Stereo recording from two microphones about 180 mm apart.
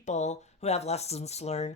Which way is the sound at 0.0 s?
40° left (ahead or behind).